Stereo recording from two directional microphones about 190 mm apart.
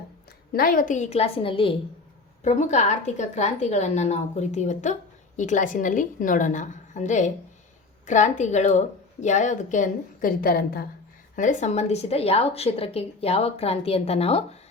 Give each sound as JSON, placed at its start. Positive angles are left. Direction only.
{"t": 0.5, "sound": "a woman's voice", "side_deg": 50}
{"t": 11.3, "sound": "a woman's voice", "side_deg": 40}